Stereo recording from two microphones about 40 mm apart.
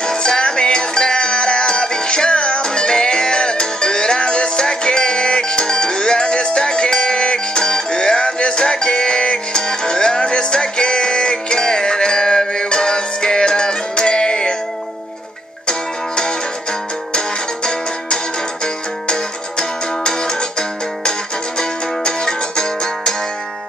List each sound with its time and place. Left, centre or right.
0.0 s music: left
20.0 s music: left